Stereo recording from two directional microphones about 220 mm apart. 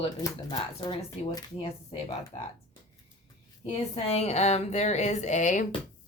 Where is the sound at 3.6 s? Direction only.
30° left (ahead or behind).